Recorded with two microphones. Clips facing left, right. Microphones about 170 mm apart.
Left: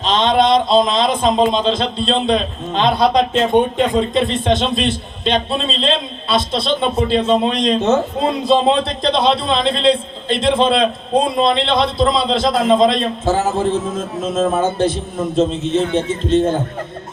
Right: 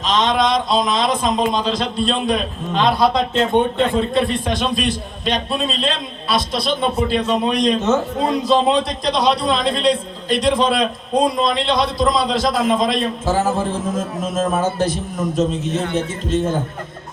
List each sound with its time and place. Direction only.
0.0 s a man's voice: 30° left (ahead or behind)